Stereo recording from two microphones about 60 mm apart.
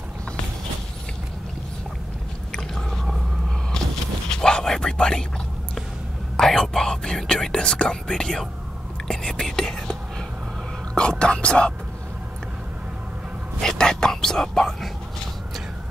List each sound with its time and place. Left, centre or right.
2.5 s a sound: centre
4.3 s whispering: centre
6.3 s whispering: centre
9.0 s speech: centre
11.0 s speech: centre
13.6 s whispering: centre